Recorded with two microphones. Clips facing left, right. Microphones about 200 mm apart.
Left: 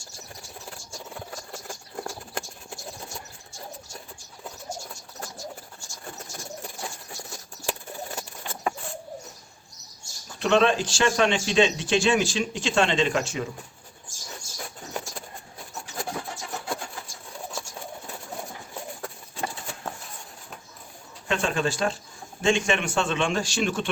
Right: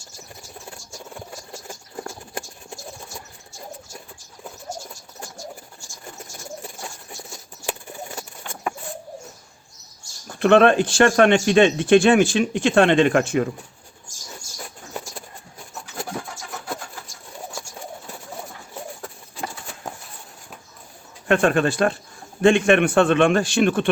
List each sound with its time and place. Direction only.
10.2 s speech: 55° right (ahead or behind)
21.2 s speech: 55° right (ahead or behind)